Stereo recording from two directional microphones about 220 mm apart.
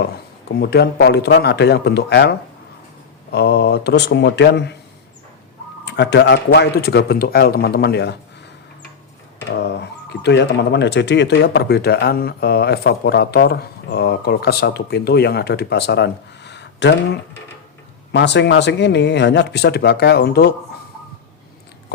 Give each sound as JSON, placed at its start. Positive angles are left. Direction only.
{"t": 0.6, "sound": "speech", "side_deg": 45}
{"t": 3.3, "sound": "speech", "side_deg": 45}
{"t": 5.8, "sound": "speech", "side_deg": 50}
{"t": 9.6, "sound": "speech", "side_deg": 50}
{"t": 18.1, "sound": "speech", "side_deg": 50}